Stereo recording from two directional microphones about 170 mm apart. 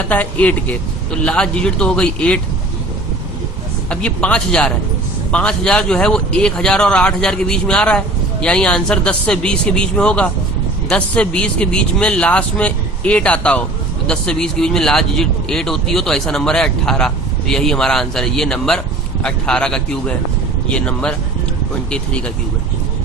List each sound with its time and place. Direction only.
0.1 s a man's voice: 10° left (ahead or behind)
3.8 s a man's voice: 5° left (ahead or behind)